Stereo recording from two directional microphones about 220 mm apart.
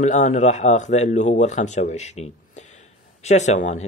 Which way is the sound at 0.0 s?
30° left (ahead or behind).